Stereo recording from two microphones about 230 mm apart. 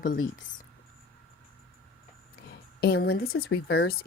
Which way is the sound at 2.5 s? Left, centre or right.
Left.